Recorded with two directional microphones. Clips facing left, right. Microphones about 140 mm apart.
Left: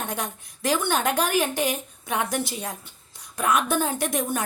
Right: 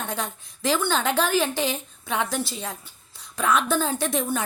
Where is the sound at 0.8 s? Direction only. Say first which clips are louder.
Even; 15° left (ahead or behind).